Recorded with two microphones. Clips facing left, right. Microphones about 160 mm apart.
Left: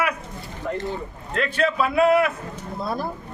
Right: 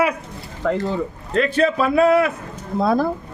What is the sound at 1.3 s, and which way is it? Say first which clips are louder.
Speech: right 5 dB; 40° right (ahead or behind).